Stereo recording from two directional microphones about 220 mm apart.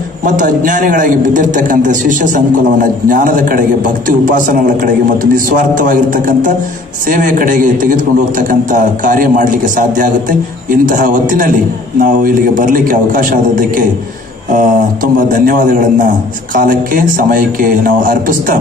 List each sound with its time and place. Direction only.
0.2 s a man's voice: 35° right (ahead or behind)